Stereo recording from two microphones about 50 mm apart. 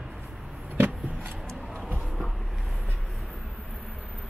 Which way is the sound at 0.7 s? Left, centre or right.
Right.